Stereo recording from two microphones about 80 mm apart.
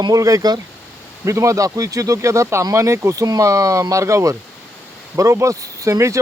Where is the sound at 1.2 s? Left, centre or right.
Right.